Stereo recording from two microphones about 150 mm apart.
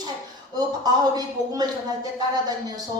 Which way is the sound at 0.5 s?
25° right (ahead or behind).